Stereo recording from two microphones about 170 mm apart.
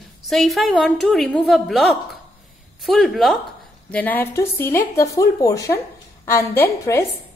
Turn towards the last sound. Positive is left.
turn(degrees=15)  # may be behind; listen again after turning